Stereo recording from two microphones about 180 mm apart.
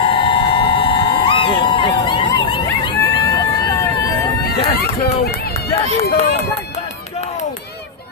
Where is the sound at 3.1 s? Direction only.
20° left (ahead or behind).